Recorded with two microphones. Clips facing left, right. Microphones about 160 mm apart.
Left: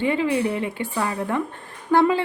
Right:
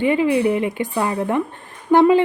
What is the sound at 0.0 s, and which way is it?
A woman's voice, 15° right (ahead or behind).